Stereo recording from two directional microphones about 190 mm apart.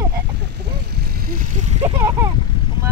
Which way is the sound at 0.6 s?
55° right (ahead or behind).